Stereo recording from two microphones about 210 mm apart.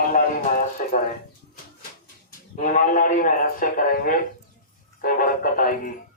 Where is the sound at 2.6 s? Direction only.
40° left (ahead or behind).